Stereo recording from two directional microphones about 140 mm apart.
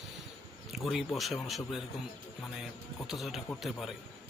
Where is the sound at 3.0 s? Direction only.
Centre (ahead or behind).